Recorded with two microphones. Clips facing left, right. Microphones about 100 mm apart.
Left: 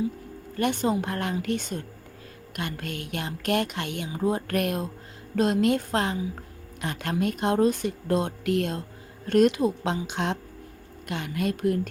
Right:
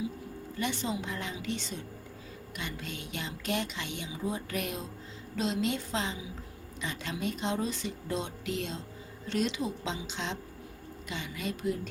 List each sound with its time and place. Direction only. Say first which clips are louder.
0.5 s a woman's voice: left 9 dB; 55° left (ahead or behind)